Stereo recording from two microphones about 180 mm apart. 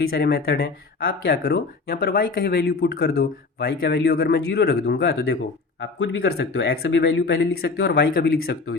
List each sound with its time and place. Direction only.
0.1 s speech: 60° left (ahead or behind)